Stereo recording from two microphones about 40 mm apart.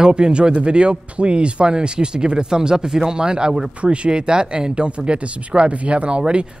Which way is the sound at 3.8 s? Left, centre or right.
Right.